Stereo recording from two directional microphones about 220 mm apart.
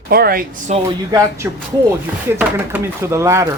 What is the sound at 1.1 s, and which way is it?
Speech, 15° right (ahead or behind).